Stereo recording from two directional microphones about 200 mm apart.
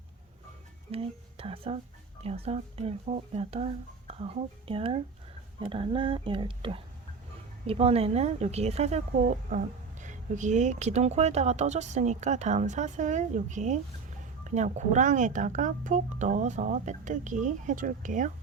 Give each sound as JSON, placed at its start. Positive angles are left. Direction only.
{"t": 0.9, "sound": "speech", "side_deg": -30}